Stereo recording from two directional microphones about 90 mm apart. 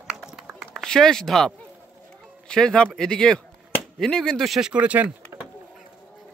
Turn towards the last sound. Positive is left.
turn(degrees=-15)  # may be behind; listen again after turning